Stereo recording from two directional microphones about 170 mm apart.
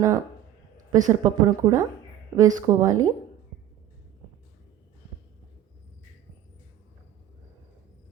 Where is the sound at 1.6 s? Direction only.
20° right (ahead or behind).